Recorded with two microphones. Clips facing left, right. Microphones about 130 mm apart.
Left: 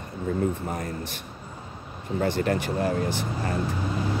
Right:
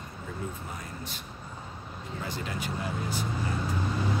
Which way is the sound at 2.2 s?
60° left (ahead or behind).